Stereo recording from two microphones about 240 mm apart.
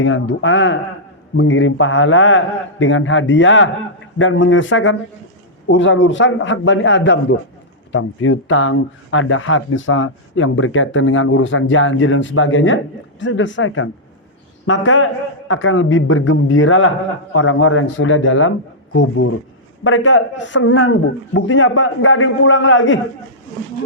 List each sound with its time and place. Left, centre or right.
0.0 s a man's voice: left